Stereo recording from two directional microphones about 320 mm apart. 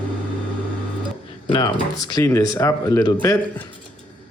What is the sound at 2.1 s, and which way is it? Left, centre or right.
Speech, centre.